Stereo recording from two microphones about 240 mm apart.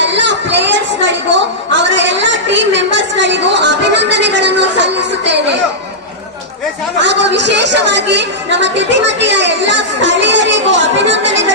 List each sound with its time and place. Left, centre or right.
0.0 s a woman's voice: right
7.0 s a woman's voice: right